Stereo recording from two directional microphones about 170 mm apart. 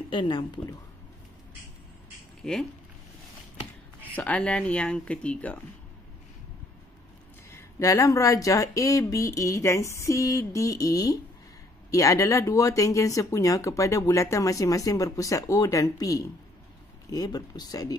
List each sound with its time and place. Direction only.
0.1 s speech: 30° left (ahead or behind)
2.4 s speech: 5° left (ahead or behind)
4.0 s speech: 10° left (ahead or behind)
7.5 s speech: 20° left (ahead or behind)